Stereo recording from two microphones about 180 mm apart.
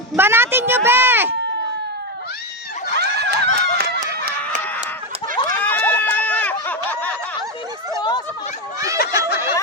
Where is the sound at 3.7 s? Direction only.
60° right (ahead or behind).